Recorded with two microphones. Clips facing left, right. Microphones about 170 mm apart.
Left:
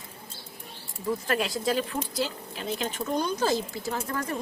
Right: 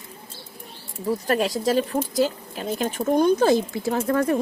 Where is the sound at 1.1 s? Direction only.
40° right (ahead or behind).